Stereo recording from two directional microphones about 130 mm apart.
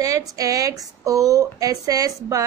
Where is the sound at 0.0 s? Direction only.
25° right (ahead or behind).